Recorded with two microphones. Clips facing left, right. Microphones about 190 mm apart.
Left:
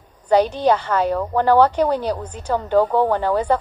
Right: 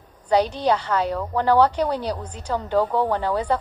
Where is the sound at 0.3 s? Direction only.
50° left (ahead or behind).